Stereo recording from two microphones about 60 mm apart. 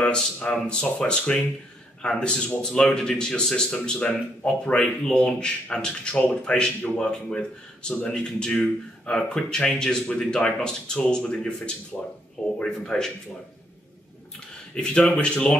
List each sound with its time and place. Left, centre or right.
0.0 s speech: centre
14.7 s speech: centre